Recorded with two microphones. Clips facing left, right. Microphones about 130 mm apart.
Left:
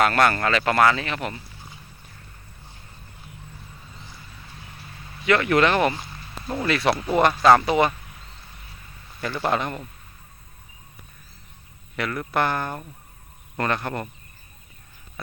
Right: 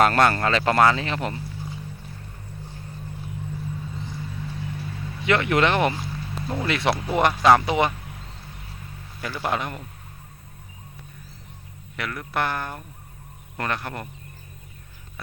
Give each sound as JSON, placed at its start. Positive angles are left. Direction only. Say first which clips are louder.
{"t": 0.0, "sound": "speech", "louder": "right 1 dB", "side_deg": -30}
{"t": 5.2, "sound": "speech", "louder": "left 1 dB", "side_deg": -20}
{"t": 9.2, "sound": "speech", "louder": "left 3 dB", "side_deg": -10}
{"t": 11.9, "sound": "speech", "louder": "left 3 dB", "side_deg": 0}